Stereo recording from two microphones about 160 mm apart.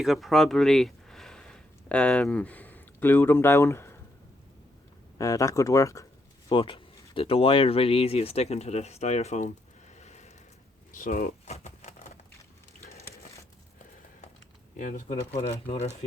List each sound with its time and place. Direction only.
0.0 s speech: centre (ahead or behind); by 4.0 s 15° left (ahead or behind)
5.1 s speech: 20° left (ahead or behind)
6.5 s speech: 30° left (ahead or behind)
9.9 s a sound: 45° left (ahead or behind)
10.9 s speech: 60° left (ahead or behind)
11.4 s a sound: 45° left (ahead or behind)
14.8 s speech: 55° left (ahead or behind)
15.4 s speech: 40° left (ahead or behind)